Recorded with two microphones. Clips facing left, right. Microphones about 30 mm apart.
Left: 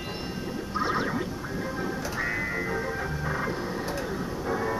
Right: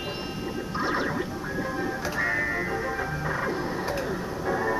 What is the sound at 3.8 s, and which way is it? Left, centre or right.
Vehicle, centre.